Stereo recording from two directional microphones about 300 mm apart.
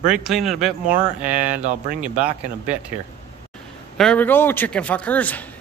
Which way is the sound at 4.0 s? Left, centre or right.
Centre.